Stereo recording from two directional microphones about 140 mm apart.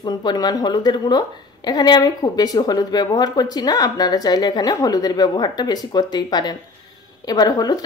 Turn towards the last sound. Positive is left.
turn(degrees=30)  # may be behind; listen again after turning